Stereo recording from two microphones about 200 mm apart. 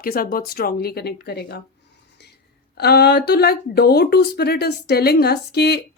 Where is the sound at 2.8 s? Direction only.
55° left (ahead or behind).